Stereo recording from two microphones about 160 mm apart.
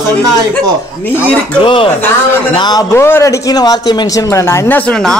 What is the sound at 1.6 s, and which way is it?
A man's voice, 35° left (ahead or behind).